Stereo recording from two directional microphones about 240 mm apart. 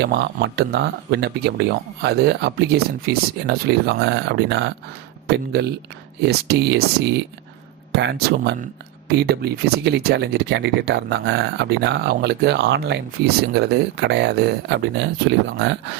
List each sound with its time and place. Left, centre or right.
0.0 s speech: right
6.2 s speech: right
7.9 s speech: right